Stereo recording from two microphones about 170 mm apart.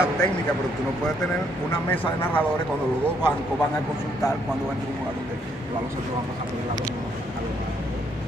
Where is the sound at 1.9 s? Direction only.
10° left (ahead or behind).